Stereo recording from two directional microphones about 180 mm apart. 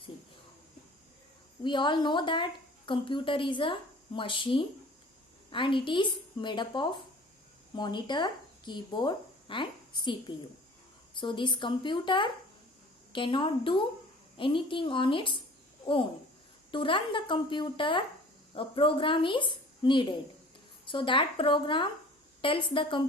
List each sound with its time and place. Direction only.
1.6 s a woman's voice: 25° left (ahead or behind)